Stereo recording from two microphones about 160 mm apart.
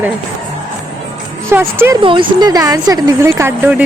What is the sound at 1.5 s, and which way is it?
Speech, 15° right (ahead or behind).